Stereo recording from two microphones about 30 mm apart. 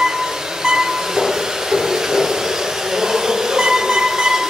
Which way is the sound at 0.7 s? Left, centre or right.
Centre.